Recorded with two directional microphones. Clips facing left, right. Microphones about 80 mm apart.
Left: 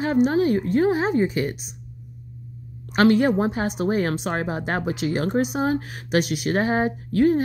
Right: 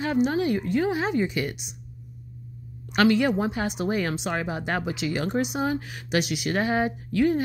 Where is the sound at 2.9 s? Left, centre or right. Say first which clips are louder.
Left 3 dB; left.